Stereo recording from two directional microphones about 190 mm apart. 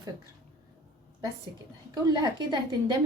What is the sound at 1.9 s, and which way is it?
A woman's voice, 20° right (ahead or behind).